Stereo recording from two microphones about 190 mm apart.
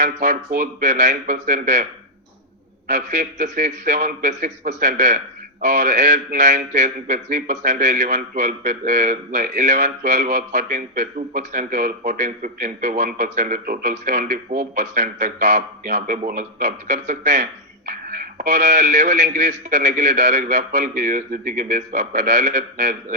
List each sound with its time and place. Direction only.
0.0 s a man's voice: 40° right (ahead or behind)